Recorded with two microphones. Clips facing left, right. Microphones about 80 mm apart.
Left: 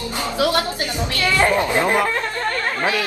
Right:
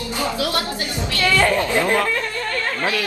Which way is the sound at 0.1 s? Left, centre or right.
Left.